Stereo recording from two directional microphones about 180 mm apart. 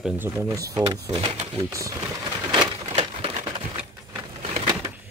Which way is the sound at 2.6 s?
30° right (ahead or behind).